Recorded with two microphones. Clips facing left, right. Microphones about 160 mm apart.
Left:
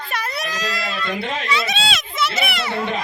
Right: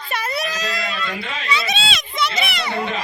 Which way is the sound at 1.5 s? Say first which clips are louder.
Right 2 dB; centre (ahead or behind).